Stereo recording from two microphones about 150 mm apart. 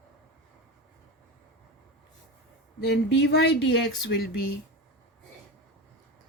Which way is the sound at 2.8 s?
90° left.